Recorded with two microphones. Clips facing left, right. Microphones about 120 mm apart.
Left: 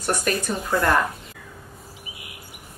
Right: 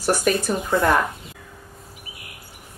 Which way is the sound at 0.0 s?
5° right (ahead or behind).